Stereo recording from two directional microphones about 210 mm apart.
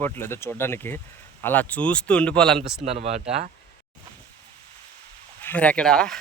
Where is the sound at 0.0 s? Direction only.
10° left (ahead or behind).